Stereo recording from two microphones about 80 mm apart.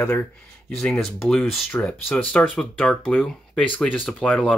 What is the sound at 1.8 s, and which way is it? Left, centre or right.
Speech, centre.